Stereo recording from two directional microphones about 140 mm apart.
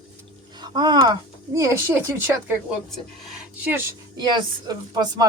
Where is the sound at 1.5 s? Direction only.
20° right (ahead or behind).